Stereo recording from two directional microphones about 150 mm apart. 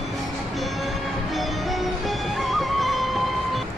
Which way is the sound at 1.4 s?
Centre (ahead or behind).